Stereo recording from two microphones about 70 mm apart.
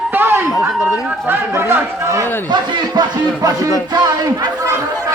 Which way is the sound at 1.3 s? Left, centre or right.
Right.